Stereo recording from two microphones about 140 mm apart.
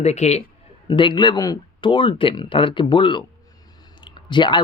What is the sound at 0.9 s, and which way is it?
Speech, 35° left (ahead or behind).